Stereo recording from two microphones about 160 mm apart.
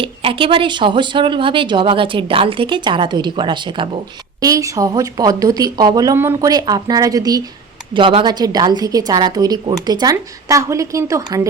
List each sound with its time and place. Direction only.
0.0 s a woman's voice: 35° right (ahead or behind)